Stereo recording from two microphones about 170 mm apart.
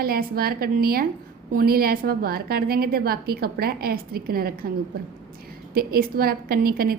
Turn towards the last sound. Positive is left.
turn(degrees=-60)  # may be behind; listen again after turning